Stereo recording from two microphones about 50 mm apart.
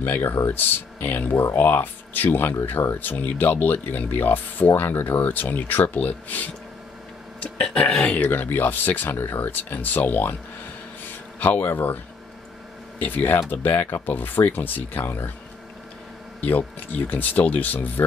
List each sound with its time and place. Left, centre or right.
0.0 s speech: left
7.5 s speech: left
8.0 s speech: left
11.1 s a sound: left
13.0 s speech: left
16.4 s speech: left